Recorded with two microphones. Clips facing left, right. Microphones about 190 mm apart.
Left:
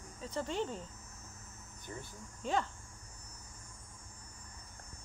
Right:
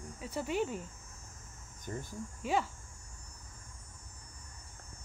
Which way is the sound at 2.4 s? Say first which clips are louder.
Right 2 dB; 10° right (ahead or behind).